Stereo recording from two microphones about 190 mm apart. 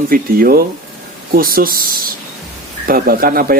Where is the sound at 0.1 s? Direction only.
50° right (ahead or behind).